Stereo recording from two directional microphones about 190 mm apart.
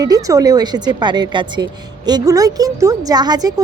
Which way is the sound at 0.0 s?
20° right (ahead or behind).